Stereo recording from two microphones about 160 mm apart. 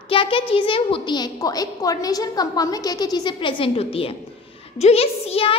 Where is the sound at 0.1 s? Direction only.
35° left (ahead or behind).